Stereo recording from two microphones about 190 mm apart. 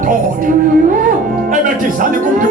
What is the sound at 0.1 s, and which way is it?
Speech, 45° right (ahead or behind).